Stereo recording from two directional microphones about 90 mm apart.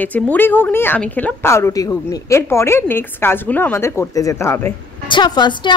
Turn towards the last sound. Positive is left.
turn(degrees=55)  # may be behind; listen again after turning